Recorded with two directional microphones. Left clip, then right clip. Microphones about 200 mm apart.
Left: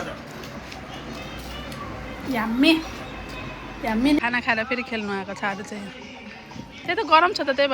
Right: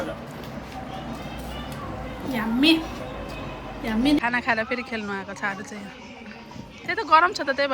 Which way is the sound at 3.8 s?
20° left (ahead or behind).